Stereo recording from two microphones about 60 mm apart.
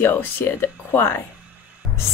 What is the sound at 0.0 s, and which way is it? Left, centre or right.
Speech, left.